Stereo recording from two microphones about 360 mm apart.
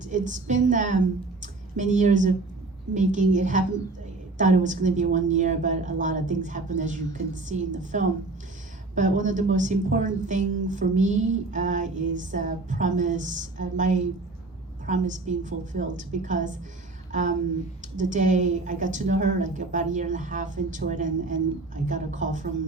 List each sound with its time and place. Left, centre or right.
0.0 s a woman's voice: right
17.1 s a sound: centre
17.9 s a woman's voice: right